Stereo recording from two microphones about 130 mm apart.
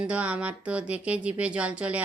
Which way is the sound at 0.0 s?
10° right (ahead or behind).